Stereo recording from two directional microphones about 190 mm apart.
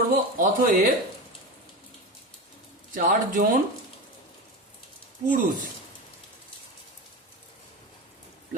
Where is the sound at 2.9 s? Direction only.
45° right (ahead or behind).